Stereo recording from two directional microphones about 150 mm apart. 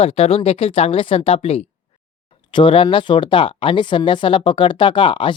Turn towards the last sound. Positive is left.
turn(degrees=35)  # may be behind; listen again after turning